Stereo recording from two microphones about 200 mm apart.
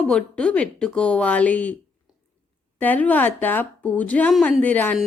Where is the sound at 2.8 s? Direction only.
10° left (ahead or behind).